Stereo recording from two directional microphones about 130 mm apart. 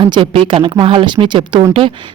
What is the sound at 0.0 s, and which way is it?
Speech, 40° right (ahead or behind).